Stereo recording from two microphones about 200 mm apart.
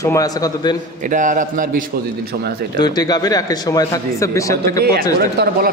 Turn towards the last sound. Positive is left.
turn(degrees=-50)  # may be behind; listen again after turning